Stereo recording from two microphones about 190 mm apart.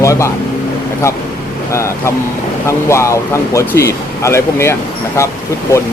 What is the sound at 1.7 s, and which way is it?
Speech, 15° left (ahead or behind).